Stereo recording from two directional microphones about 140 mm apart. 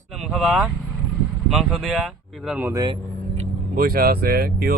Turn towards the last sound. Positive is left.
turn(degrees=-90)